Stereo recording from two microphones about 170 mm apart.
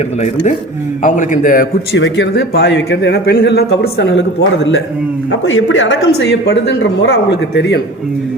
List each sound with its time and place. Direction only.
1.0 s a man's voice: 50° left (ahead or behind)
2.0 s speech: 85° left
5.8 s speech: 90° left